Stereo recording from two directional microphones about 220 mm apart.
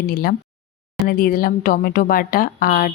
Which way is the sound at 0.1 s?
40° left (ahead or behind).